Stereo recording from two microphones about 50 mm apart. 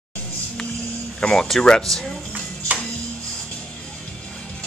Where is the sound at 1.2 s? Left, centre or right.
Centre.